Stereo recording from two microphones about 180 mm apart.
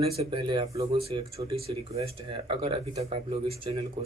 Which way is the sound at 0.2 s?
25° right (ahead or behind).